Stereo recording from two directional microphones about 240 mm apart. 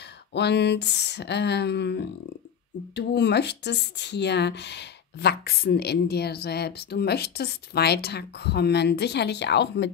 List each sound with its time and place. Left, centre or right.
0.3 s speech: left